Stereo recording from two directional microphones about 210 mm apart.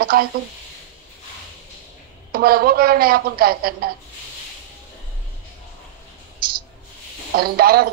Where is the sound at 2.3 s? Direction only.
45° right (ahead or behind).